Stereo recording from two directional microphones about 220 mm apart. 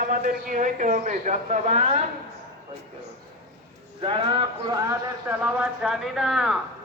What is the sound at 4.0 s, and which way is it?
Speech, 25° right (ahead or behind).